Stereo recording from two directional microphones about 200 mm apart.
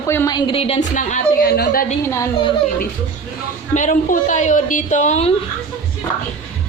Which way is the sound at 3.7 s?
40° left (ahead or behind).